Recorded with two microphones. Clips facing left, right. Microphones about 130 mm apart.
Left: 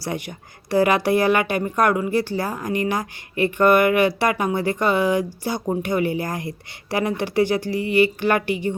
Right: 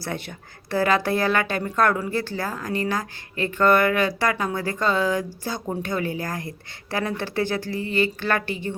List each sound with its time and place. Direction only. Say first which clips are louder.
0.0 s speech: left 3 dB; 15° left (ahead or behind)